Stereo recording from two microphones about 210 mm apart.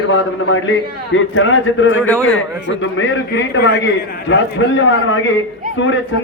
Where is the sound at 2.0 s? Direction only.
5° left (ahead or behind).